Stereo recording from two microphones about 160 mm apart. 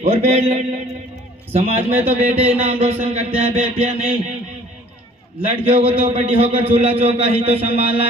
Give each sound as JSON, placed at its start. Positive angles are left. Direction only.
{"t": 0.0, "sound": "mantra", "side_deg": -45}
{"t": 1.5, "sound": "a man's voice", "side_deg": -40}
{"t": 5.7, "sound": "a man's voice", "side_deg": -40}